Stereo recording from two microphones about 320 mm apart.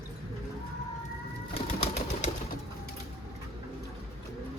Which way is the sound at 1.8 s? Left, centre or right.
Left.